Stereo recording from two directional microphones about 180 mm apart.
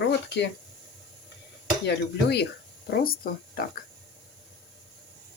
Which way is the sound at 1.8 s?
70° left (ahead or behind).